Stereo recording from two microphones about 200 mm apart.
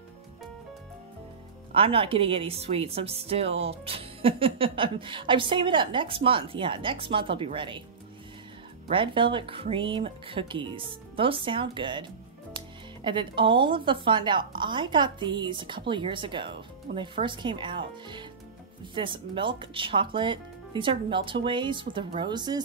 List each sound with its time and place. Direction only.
1.7 s a woman's voice: 30° right (ahead or behind)
8.9 s a woman's voice: 25° right (ahead or behind)